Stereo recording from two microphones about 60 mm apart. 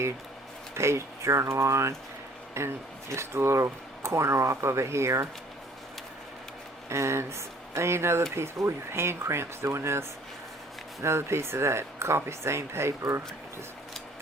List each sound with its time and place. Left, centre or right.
0.7 s speech: right
6.8 s speech: right